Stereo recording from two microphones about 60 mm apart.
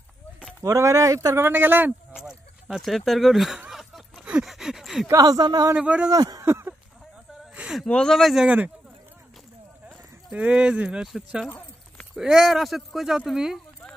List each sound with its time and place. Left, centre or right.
0.6 s speech: right
1.3 s speech: right
2.1 s speech: centre
4.2 s a sound: centre
5.1 s speech: right
5.8 s speech: centre
6.0 s speech: right
6.4 s a sound: right
7.8 s speech: centre
8.2 s speech: centre
8.5 s speech: right
10.3 s speech: right